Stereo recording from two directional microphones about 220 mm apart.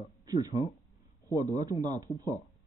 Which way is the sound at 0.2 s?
15° right (ahead or behind).